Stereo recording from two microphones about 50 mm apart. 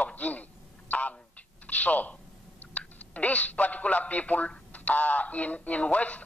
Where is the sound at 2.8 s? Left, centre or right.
Left.